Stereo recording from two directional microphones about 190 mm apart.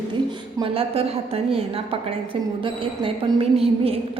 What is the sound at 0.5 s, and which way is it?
A woman's voice, 30° right (ahead or behind).